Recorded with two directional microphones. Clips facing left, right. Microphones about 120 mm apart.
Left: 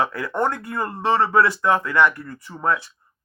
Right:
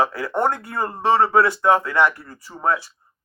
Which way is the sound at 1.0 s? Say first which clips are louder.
Right 2 dB; 15° right (ahead or behind).